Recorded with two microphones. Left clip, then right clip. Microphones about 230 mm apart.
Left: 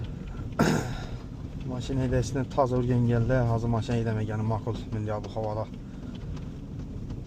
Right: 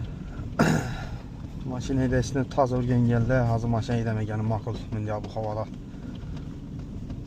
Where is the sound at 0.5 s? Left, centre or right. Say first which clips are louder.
Right 2 dB; centre.